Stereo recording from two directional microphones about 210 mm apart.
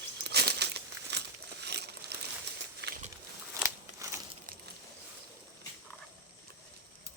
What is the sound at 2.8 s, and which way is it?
Pig, 50° right (ahead or behind).